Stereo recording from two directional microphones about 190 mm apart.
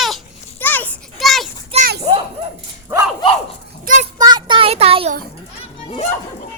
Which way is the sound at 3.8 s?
45° right (ahead or behind).